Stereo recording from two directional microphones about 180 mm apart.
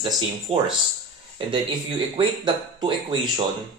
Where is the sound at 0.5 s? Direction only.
35° right (ahead or behind).